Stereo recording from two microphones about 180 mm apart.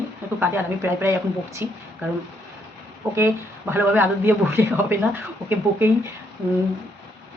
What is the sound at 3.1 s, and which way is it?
A man's voice, 15° right (ahead or behind).